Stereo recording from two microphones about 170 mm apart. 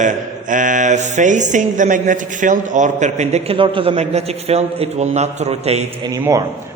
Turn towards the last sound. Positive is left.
turn(degrees=-20)  # may be behind; listen again after turning